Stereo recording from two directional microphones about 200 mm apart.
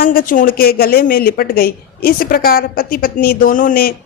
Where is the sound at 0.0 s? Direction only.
45° left (ahead or behind).